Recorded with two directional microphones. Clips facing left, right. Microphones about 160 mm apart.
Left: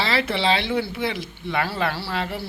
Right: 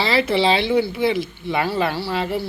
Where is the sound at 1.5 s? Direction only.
20° right (ahead or behind).